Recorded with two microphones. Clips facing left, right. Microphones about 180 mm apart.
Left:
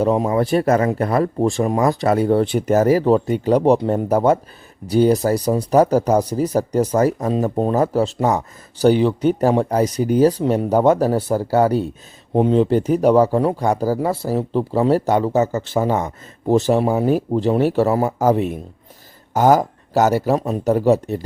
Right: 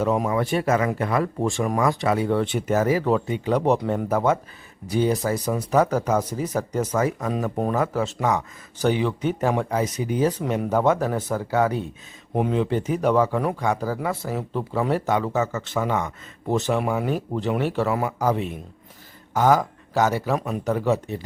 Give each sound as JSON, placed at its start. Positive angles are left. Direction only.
{"t": 0.0, "sound": "speech", "side_deg": 30}